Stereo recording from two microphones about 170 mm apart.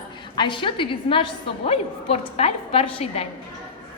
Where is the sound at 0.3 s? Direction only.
30° left (ahead or behind).